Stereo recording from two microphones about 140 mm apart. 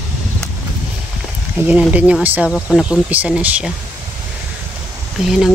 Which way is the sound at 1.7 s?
10° right (ahead or behind).